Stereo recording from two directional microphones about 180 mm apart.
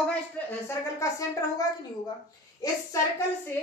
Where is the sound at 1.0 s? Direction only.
20° left (ahead or behind).